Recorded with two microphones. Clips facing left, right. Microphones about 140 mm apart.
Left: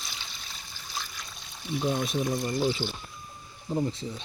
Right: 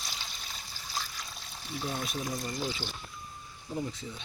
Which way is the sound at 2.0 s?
25° left (ahead or behind).